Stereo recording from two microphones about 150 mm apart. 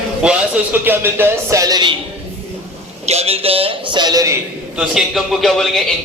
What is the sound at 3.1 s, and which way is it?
Speech, 45° right (ahead or behind).